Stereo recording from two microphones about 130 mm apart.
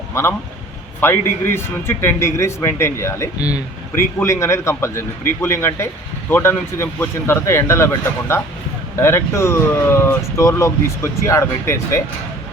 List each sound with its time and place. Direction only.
0.1 s speech: 20° left (ahead or behind)
9.0 s speech: 20° left (ahead or behind)